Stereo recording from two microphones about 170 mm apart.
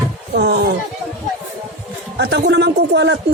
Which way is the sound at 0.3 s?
75° right (ahead or behind).